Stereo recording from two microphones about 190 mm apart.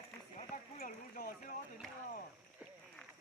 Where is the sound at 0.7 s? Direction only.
45° left (ahead or behind).